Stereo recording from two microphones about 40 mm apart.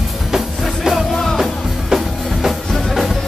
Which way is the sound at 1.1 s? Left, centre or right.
Centre.